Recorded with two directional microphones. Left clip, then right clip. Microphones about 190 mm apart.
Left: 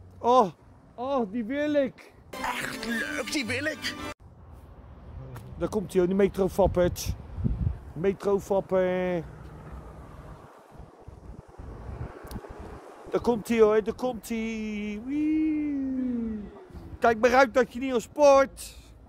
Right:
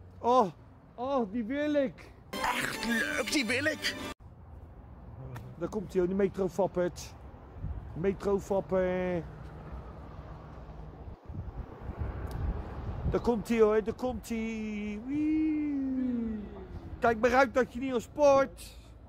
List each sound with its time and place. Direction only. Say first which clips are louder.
0.2 s speech: left 4 dB; 30° left (ahead or behind)
2.3 s speech: even; centre (ahead or behind)
5.6 s speech: left 5 dB; 35° left (ahead or behind)
13.1 s speech: left 4 dB; 35° left (ahead or behind)
17.0 s a man's voice: left 5 dB; 45° left (ahead or behind)